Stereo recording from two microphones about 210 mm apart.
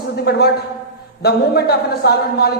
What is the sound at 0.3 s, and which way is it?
A man's voice, 50° left (ahead or behind).